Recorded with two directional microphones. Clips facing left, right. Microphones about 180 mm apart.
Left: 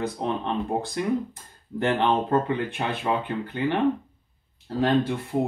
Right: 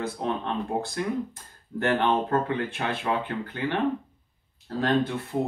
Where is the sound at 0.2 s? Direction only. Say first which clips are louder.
Even; 20° left (ahead or behind).